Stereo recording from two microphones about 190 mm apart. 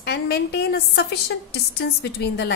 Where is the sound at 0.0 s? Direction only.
60° left (ahead or behind).